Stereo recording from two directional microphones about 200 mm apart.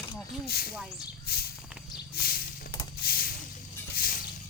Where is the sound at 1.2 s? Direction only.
50° left (ahead or behind).